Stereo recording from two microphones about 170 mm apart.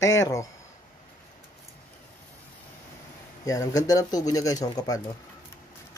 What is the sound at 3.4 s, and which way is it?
Speech, 20° left (ahead or behind).